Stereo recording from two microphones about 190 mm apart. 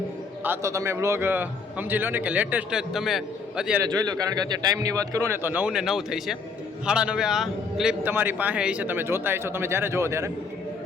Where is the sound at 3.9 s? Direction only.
20° right (ahead or behind).